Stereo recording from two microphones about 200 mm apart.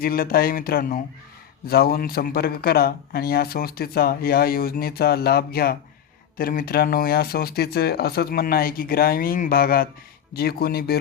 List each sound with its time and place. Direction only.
0.0 s a man's voice: 45° left (ahead or behind)